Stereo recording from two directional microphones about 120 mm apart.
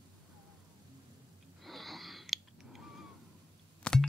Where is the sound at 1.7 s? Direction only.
Centre (ahead or behind).